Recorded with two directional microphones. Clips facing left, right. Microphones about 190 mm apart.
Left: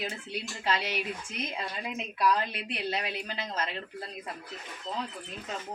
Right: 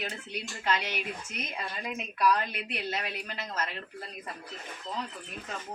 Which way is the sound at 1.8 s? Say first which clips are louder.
Right 1 dB; 25° left (ahead or behind).